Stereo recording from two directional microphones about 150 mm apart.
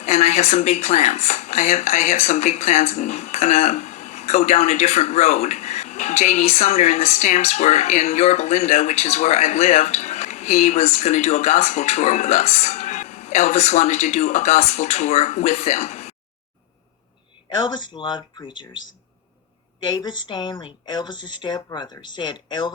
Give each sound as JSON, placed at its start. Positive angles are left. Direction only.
{"t": 0.0, "sound": "speech", "side_deg": 50}
{"t": 17.7, "sound": "speech", "side_deg": 30}
{"t": 20.0, "sound": "speech", "side_deg": 30}